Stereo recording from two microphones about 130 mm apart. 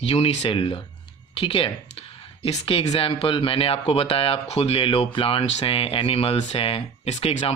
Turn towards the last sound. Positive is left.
turn(degrees=45)  # may be behind; listen again after turning